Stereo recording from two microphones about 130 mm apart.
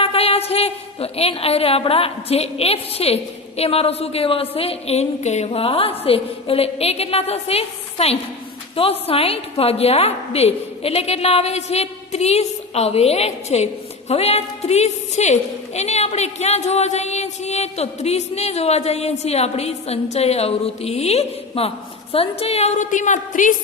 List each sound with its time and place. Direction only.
0.0 s a woman's voice: 50° left (ahead or behind); by 23.6 s 85° left